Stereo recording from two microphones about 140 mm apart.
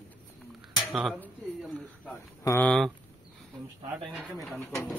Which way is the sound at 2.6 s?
Centre (ahead or behind).